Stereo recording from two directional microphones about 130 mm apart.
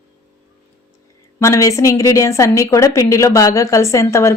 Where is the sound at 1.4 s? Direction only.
25° left (ahead or behind).